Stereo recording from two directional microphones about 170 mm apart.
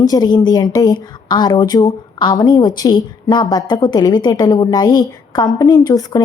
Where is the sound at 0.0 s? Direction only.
25° left (ahead or behind).